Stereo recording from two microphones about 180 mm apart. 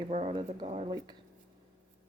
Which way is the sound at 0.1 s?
35° right (ahead or behind).